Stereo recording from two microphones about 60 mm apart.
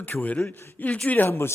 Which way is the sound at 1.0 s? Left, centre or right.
Left.